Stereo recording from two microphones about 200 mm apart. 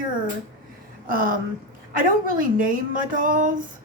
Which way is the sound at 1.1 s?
45° right (ahead or behind).